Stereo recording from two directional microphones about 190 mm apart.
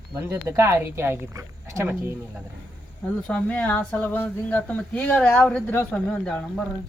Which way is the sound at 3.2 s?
5° left (ahead or behind).